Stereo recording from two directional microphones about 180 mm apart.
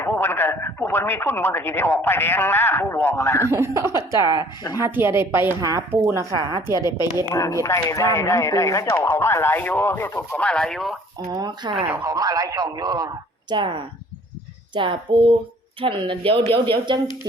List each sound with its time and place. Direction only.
0.0 s speech: 15° left (ahead or behind)
3.5 s a woman's voice: 15° right (ahead or behind)
3.9 s speech: 25° left (ahead or behind)
4.8 s a woman's voice: 15° right (ahead or behind)
7.3 s speech: 15° left (ahead or behind); by 10.9 s centre (ahead or behind)
11.3 s speech: 20° right (ahead or behind)
11.9 s a woman's voice: 10° right (ahead or behind)
12.1 s speech: 20° right (ahead or behind)